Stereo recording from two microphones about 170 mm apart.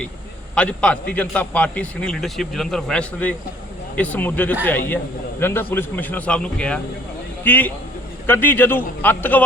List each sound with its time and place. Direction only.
0.5 s a man's voice: 5° left (ahead or behind)